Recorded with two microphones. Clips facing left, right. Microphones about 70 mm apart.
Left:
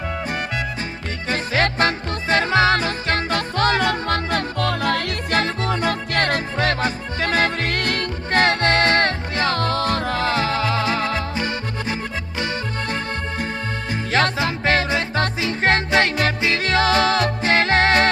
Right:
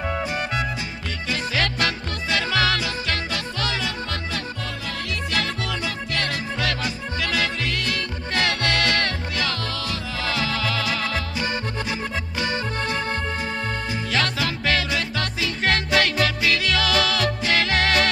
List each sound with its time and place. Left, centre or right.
1.3 s music: left
5.3 s music: left
14.1 s music: left